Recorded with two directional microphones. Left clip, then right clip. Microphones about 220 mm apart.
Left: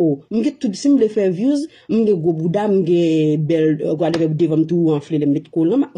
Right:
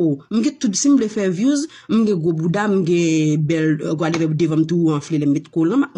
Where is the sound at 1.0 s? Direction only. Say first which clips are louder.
Left 4 dB; 25° right (ahead or behind).